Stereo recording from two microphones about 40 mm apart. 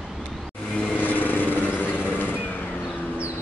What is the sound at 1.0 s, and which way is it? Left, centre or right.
Vehicle, left.